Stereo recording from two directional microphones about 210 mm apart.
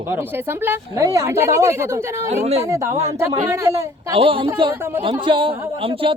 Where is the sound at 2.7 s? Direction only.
15° right (ahead or behind).